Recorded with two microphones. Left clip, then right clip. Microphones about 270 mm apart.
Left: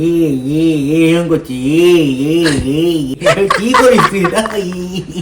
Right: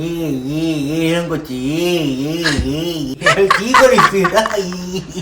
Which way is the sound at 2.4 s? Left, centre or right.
Centre.